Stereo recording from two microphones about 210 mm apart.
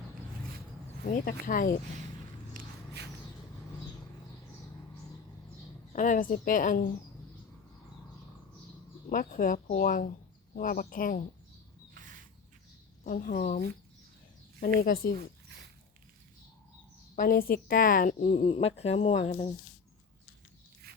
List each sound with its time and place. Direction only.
1.0 s a woman's voice: 40° left (ahead or behind)
2.5 s walk: 45° right (ahead or behind)
5.9 s a woman's voice: 40° left (ahead or behind)
9.0 s a woman's voice: 40° left (ahead or behind)
13.1 s a woman's voice: 40° left (ahead or behind)
17.2 s a woman's voice: 45° left (ahead or behind)
18.4 s a woman's voice: 30° left (ahead or behind)
20.8 s zipper: 50° right (ahead or behind)